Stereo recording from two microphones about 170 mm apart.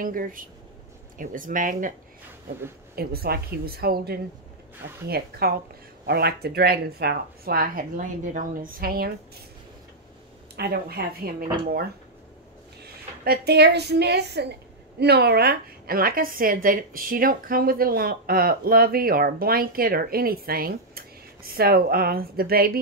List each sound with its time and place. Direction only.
0.0 s a woman's voice: 55° right (ahead or behind)
3.0 s a woman's voice: 65° right (ahead or behind)
10.5 s speech: 70° right (ahead or behind)
12.8 s a woman's voice: 65° right (ahead or behind)